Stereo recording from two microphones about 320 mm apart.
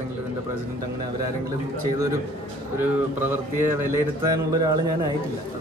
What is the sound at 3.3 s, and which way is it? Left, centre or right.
A woman's voice, centre.